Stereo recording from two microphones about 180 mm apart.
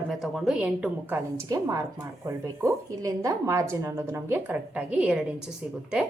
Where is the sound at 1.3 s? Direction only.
20° right (ahead or behind).